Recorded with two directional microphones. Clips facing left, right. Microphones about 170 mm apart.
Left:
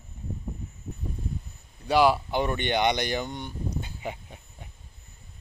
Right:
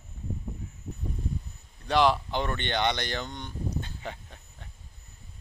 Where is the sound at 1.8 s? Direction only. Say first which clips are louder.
Left 2 dB; 10° left (ahead or behind).